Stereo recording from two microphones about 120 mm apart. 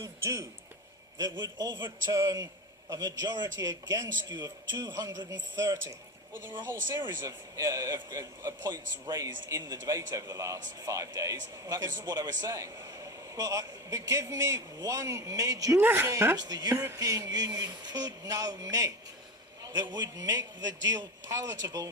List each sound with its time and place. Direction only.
0.0 s a sound: 25° right (ahead or behind)
1.2 s a man's voice: 35° right (ahead or behind)
7.0 s a man's voice: 30° right (ahead or behind)
15.8 s speech: 15° right (ahead or behind)
16.4 s a man's voice: 35° right (ahead or behind)